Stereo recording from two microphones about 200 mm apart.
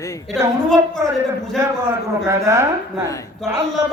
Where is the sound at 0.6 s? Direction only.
5° left (ahead or behind).